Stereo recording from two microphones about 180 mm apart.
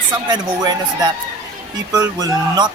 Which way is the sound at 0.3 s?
20° right (ahead or behind).